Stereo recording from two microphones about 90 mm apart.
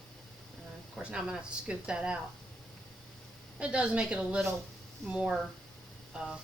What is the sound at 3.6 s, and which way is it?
Speech, 10° right (ahead or behind).